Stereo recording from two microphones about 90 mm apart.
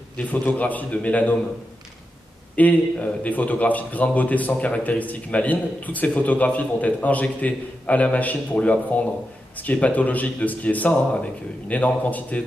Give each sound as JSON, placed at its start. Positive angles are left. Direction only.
{"t": 0.2, "sound": "a man's voice", "side_deg": 15}
{"t": 2.5, "sound": "a man's voice", "side_deg": 15}